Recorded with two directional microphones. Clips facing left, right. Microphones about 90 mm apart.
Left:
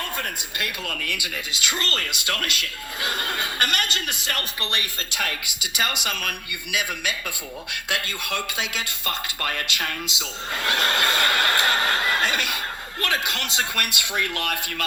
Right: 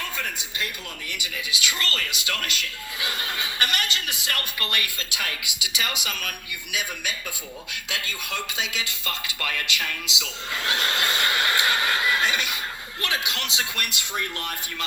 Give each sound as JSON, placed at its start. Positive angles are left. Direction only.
{"t": 0.2, "sound": "speech", "side_deg": 60}
{"t": 1.3, "sound": "a man's voice", "side_deg": 40}
{"t": 4.4, "sound": "speech", "side_deg": 25}
{"t": 5.1, "sound": "a man's voice", "side_deg": 50}
{"t": 6.7, "sound": "a man's voice", "side_deg": 70}
{"t": 14.0, "sound": "speech", "side_deg": 85}